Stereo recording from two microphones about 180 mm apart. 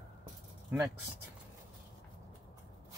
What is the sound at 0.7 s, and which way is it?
Speech, 10° right (ahead or behind).